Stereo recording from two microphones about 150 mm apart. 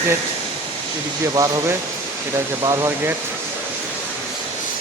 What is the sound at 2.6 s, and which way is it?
Speech, 20° right (ahead or behind).